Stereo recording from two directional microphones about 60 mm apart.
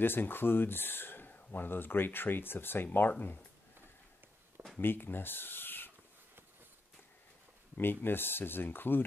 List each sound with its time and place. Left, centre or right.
0.0 s speech: left
4.7 s speech: left
7.7 s speech: left